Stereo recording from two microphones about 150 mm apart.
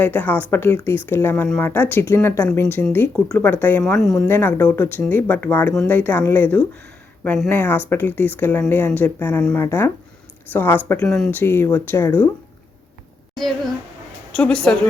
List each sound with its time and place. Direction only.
0.0 s speech: 10° left (ahead or behind)
7.5 s speech: 15° left (ahead or behind)
14.3 s speech: 5° left (ahead or behind)